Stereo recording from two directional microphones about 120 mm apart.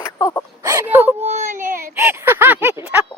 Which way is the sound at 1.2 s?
80° right.